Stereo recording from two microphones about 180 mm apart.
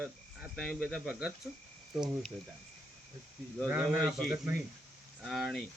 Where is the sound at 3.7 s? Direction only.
10° right (ahead or behind).